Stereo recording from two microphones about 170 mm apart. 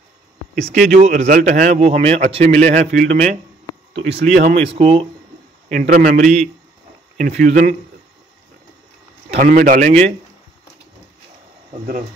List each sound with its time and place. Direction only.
0.7 s speech: 55° right (ahead or behind)
5.7 s speech: 55° right (ahead or behind)
9.4 s speech: 50° right (ahead or behind)